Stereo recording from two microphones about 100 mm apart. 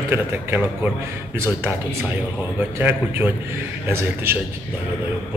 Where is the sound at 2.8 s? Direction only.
20° right (ahead or behind).